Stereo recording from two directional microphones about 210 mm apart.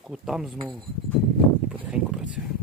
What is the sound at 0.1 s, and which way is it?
Speech, centre (ahead or behind).